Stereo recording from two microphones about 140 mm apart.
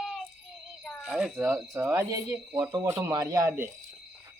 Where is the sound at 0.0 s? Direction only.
Centre (ahead or behind).